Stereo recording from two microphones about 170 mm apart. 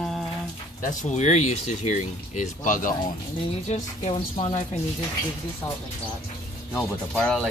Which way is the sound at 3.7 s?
40° left (ahead or behind).